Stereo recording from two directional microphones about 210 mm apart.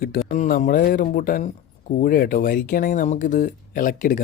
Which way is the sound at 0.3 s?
35° left (ahead or behind).